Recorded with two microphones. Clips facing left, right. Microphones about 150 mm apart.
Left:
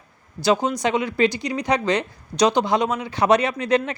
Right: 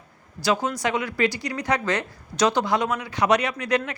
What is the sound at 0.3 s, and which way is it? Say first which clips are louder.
Speech: left 4 dB; 25° left (ahead or behind).